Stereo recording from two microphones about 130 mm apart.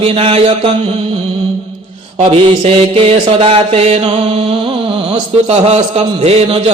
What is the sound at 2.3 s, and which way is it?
Mantra, 45° right (ahead or behind).